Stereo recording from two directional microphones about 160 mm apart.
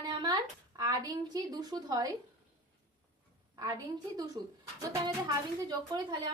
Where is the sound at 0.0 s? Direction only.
25° right (ahead or behind).